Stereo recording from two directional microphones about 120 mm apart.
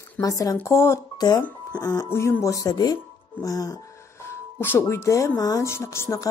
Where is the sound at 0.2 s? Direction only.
30° left (ahead or behind).